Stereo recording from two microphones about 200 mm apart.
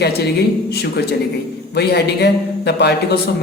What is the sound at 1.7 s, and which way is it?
Speech, 55° left (ahead or behind).